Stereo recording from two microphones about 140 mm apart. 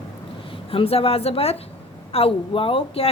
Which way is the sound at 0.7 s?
45° left (ahead or behind).